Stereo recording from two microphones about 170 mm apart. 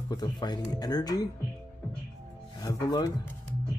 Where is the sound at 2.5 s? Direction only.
20° left (ahead or behind).